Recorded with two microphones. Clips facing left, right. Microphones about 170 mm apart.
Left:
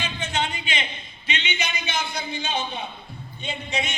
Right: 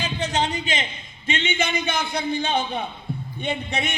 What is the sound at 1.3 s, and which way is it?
A man's voice, 50° right (ahead or behind).